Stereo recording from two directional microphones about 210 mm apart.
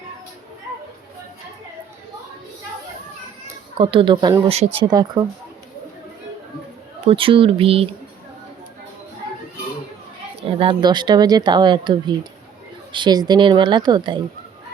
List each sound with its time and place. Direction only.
3.4 s speech: 25° right (ahead or behind)
7.1 s speech: 25° right (ahead or behind)
10.6 s speech: 20° right (ahead or behind)